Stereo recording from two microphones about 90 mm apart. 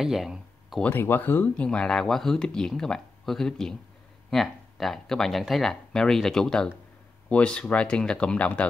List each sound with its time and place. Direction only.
0.0 s speech: 5° right (ahead or behind)
0.8 s speech: 25° left (ahead or behind)
1.7 s speech: 5° left (ahead or behind)